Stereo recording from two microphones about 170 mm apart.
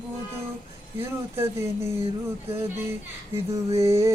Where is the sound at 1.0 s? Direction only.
15° right (ahead or behind).